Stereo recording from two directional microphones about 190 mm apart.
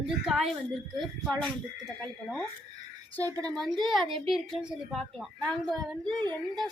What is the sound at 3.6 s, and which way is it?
Speech, centre (ahead or behind).